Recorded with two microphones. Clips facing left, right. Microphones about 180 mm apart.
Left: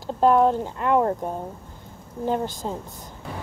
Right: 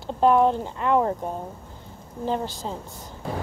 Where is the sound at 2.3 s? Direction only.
50° left (ahead or behind).